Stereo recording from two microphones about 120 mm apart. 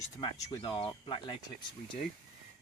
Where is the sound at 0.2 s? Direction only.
40° left (ahead or behind).